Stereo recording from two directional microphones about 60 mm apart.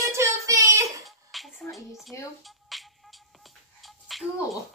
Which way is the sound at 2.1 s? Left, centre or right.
Left.